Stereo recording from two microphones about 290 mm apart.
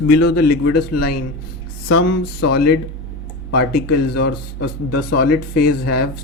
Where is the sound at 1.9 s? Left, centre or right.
Left.